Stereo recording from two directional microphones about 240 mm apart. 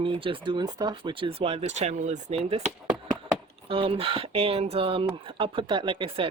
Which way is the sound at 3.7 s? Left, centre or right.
Right.